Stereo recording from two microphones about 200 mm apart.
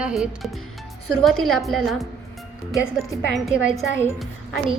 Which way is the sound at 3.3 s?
Centre (ahead or behind).